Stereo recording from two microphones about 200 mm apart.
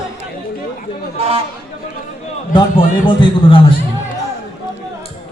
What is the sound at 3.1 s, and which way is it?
Speech, 25° left (ahead or behind).